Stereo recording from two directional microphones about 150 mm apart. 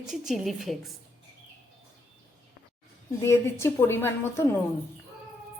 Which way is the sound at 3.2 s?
20° left (ahead or behind).